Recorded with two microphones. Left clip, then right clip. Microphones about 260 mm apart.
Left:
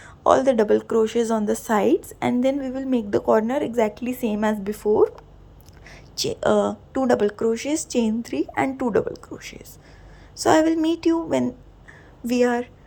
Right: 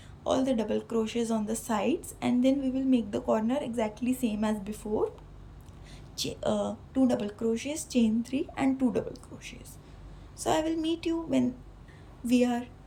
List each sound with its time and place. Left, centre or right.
0.0 s a woman's voice: centre
5.9 s a woman's voice: centre